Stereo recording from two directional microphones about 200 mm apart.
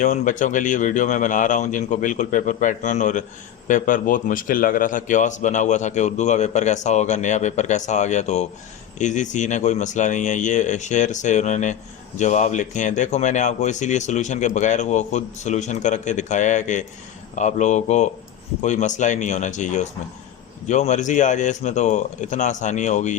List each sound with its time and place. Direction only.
0.0 s speech: 40° left (ahead or behind)